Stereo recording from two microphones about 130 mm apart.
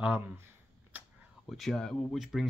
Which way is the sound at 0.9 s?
15° right (ahead or behind).